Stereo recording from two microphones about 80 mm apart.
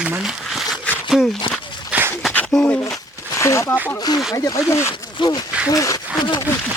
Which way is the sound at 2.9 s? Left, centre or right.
Left.